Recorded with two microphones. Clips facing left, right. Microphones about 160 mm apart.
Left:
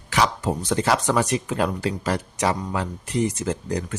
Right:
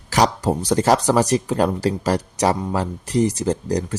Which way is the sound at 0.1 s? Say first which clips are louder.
Right 4 dB; 40° right (ahead or behind).